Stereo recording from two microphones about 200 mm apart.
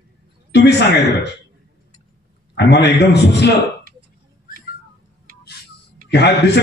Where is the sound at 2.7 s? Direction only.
55° left (ahead or behind).